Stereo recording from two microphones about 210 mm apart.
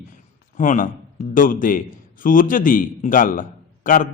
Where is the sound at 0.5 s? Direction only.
40° left (ahead or behind).